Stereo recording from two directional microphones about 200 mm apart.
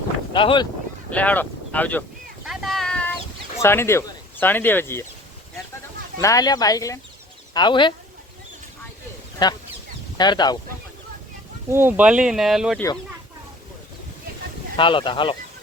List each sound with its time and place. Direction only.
0.3 s speech: 25° left (ahead or behind)
1.1 s speech: 5° left (ahead or behind)
2.4 s a sound: centre (ahead or behind)
3.6 s speech: 10° left (ahead or behind)
6.1 s speech: 20° left (ahead or behind)
9.4 s speech: 20° left (ahead or behind)
11.7 s speech: 10° right (ahead or behind)
14.8 s speech: 25° left (ahead or behind)